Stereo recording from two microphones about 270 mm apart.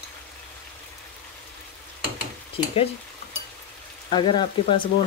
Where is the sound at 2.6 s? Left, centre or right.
Centre.